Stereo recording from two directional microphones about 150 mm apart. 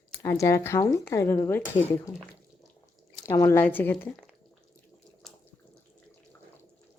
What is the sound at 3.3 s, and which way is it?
Speech, 15° left (ahead or behind).